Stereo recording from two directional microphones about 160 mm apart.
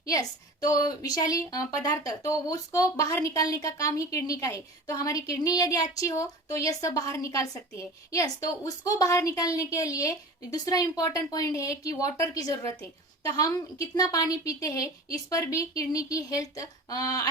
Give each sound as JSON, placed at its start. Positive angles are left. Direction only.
{"t": 0.0, "sound": "a woman's voice", "side_deg": 20}